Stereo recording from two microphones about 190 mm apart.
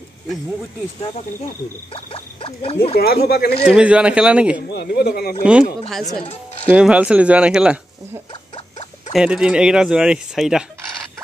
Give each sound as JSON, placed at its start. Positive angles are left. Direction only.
{"t": 2.0, "sound": "speech", "side_deg": 30}
{"t": 3.0, "sound": "speech", "side_deg": 55}
{"t": 3.6, "sound": "speech", "side_deg": -5}
{"t": 4.7, "sound": "speech", "side_deg": 60}
{"t": 5.4, "sound": "speech", "side_deg": -5}